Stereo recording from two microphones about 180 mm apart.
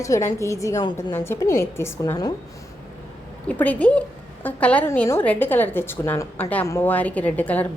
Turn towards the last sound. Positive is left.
turn(degrees=10)  # may be behind; listen again after turning